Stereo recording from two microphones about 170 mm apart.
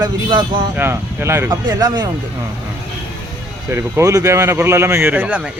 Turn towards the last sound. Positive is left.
turn(degrees=-10)  # may be behind; listen again after turning